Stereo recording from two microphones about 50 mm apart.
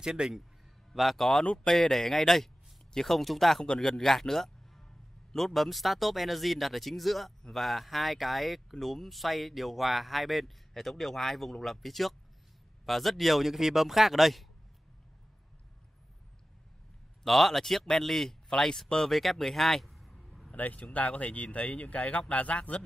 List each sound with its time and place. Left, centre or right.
0.0 s speech: centre
0.9 s speech: centre
1.4 s speech: centre
17.2 s speech: centre
20.5 s a man's voice: left